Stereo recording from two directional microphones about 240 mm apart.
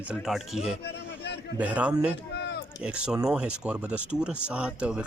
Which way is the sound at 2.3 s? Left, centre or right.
Left.